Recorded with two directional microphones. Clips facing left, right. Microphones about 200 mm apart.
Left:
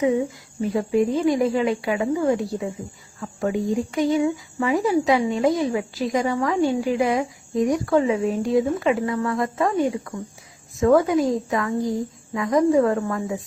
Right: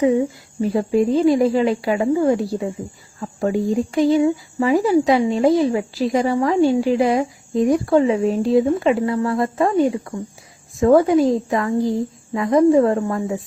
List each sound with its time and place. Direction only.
0.6 s speech: 30° right (ahead or behind)